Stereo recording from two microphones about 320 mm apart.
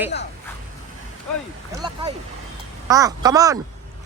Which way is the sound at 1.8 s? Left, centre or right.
Centre.